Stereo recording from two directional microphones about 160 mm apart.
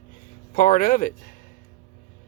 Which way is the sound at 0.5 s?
60° left (ahead or behind).